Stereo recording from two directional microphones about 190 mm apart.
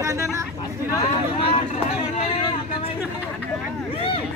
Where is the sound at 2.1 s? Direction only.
30° left (ahead or behind).